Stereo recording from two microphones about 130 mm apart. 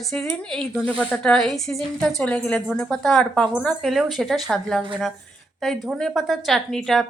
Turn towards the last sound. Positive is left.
turn(degrees=0)  # may be behind; listen again after turning